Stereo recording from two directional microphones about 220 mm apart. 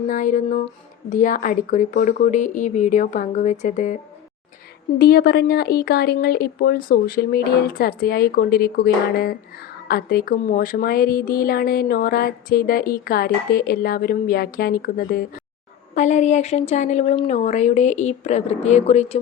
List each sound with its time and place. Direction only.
0.1 s speech: 35° left (ahead or behind)
4.9 s a woman's voice: 45° left (ahead or behind); by 19.2 s 30° left (ahead or behind)